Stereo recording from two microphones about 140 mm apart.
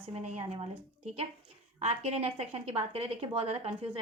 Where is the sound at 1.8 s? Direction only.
50° right (ahead or behind).